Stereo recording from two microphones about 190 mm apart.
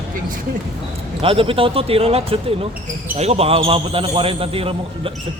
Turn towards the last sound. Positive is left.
turn(degrees=-30)  # may be behind; listen again after turning